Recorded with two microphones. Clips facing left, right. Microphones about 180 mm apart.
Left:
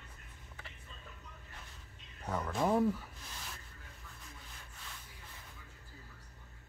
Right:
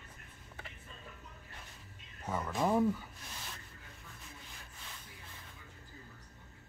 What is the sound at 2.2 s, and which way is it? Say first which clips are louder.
Speech: even; centre (ahead or behind).